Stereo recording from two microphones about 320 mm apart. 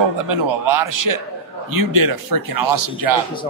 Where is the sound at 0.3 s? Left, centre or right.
Right.